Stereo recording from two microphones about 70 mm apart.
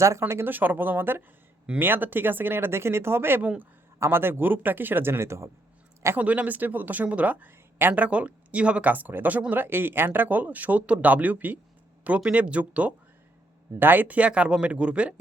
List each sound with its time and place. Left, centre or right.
0.0 s speech: right
3.4 s speech: right
4.0 s speech: right
6.1 s speech: right